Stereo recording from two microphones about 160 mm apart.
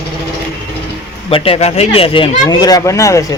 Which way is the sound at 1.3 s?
35° left (ahead or behind).